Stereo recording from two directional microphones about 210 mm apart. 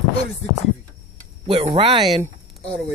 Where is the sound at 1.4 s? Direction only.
25° right (ahead or behind).